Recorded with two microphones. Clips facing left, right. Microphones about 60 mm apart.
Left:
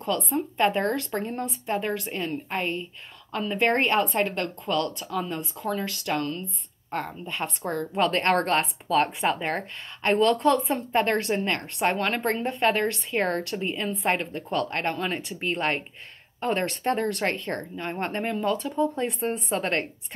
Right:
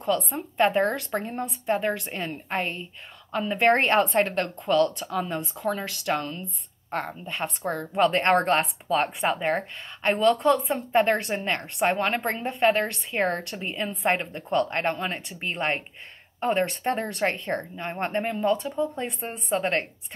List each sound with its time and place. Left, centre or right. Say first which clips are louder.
0.0 s a woman's voice: even; centre
6.9 s a woman's voice: right 1 dB; right
7.2 s a woman's voice: right 1 dB; centre
13.2 s a woman's voice: right 1 dB; right
13.6 s a woman's voice: left 2 dB; centre